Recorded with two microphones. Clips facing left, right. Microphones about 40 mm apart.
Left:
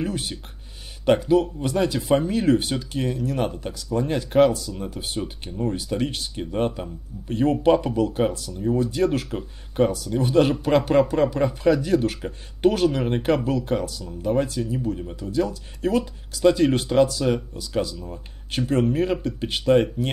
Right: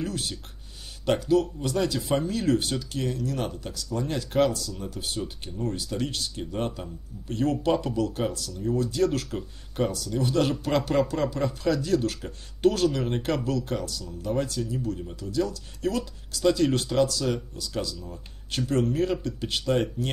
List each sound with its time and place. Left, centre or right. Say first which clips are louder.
0.0 s music: left 4 dB; left
1.0 s speech: left 4 dB; left